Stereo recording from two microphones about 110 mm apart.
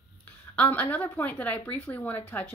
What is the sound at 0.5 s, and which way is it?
A woman's voice, 15° left (ahead or behind).